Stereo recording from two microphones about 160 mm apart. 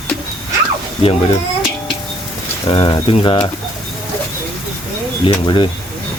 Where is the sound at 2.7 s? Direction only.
35° left (ahead or behind).